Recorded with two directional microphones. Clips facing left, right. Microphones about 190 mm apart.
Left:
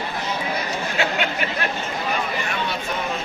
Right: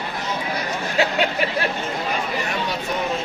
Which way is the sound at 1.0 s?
35° right (ahead or behind).